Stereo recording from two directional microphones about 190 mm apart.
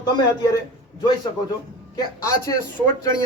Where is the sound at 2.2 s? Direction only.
20° left (ahead or behind).